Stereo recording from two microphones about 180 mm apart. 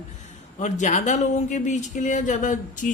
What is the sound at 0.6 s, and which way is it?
Speech, 40° left (ahead or behind).